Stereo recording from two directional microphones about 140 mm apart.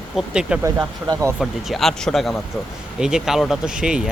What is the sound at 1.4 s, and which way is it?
Speech, centre (ahead or behind).